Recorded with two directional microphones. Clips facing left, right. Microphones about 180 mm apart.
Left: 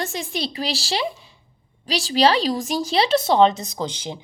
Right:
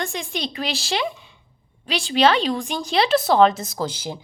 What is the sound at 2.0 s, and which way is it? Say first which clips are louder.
Speech: even; 40° left (ahead or behind).